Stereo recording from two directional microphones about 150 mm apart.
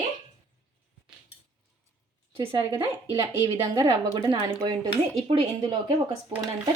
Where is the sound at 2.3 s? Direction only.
35° right (ahead or behind).